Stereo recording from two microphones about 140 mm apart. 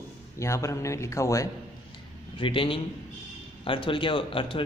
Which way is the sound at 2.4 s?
40° left (ahead or behind).